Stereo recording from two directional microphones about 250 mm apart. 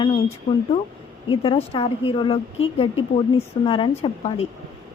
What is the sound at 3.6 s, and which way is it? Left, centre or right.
Speech, left.